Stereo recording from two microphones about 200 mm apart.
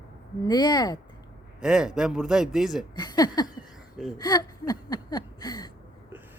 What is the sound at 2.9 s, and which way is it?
Speech, 20° left (ahead or behind).